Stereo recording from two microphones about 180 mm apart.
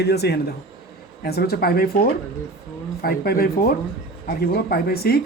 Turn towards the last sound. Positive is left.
turn(degrees=60)  # may be behind; listen again after turning